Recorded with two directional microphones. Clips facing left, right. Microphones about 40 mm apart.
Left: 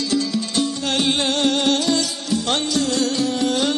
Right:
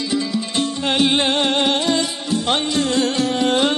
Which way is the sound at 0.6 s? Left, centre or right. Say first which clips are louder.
Right 3 dB; right.